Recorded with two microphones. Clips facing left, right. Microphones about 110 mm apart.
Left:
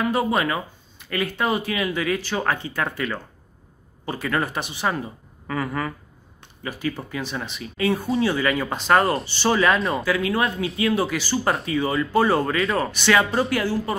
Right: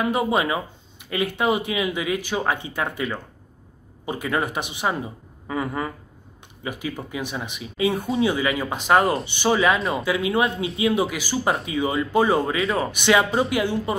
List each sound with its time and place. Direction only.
0.0 s speech: 20° right (ahead or behind); by 10.0 s centre (ahead or behind)
10.0 s speech: 20° right (ahead or behind)
12.5 s speech: centre (ahead or behind)
12.9 s speech: 15° right (ahead or behind)